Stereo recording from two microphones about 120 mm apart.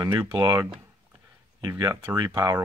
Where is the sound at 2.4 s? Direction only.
25° right (ahead or behind).